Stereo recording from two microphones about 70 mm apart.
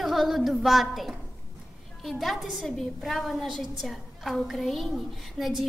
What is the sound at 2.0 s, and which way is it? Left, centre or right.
A woman's voice, centre.